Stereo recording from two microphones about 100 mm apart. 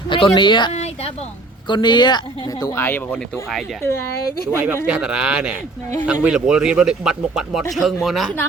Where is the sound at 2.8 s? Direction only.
20° left (ahead or behind).